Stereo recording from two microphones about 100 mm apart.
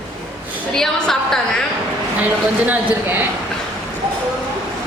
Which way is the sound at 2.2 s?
15° right (ahead or behind).